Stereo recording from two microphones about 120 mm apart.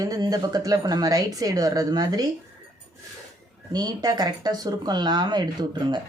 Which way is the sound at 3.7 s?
35° right (ahead or behind).